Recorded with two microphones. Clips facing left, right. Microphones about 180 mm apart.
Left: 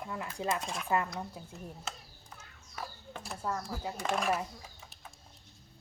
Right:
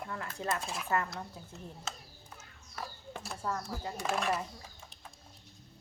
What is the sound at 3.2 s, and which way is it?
Speech, 5° left (ahead or behind).